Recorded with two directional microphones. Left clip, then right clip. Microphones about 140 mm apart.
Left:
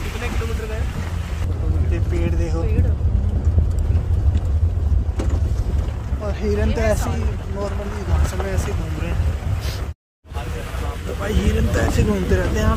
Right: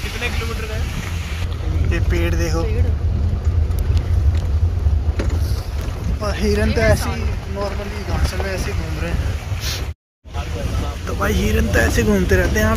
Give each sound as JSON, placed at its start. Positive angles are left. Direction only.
{"t": 1.9, "sound": "speech", "side_deg": -5}
{"t": 6.2, "sound": "speech", "side_deg": -10}
{"t": 11.1, "sound": "speech", "side_deg": -30}